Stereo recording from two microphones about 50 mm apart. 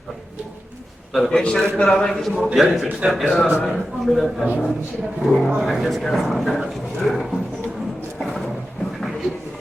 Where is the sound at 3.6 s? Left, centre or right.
Centre.